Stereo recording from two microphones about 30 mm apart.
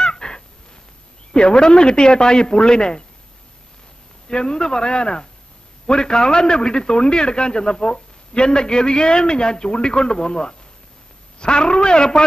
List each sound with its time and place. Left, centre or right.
0.0 s a sound: left
1.3 s a man's voice: left
4.3 s a man's voice: left